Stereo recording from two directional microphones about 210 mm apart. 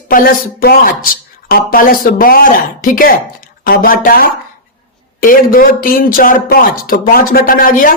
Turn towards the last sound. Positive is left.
turn(degrees=40)  # may be behind; listen again after turning